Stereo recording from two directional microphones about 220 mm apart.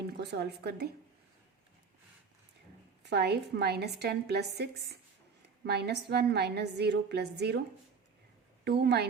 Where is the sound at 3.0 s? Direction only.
50° right (ahead or behind).